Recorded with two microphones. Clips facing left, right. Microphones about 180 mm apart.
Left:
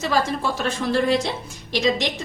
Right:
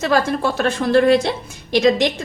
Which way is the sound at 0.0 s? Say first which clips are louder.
Right 4 dB; 60° right (ahead or behind).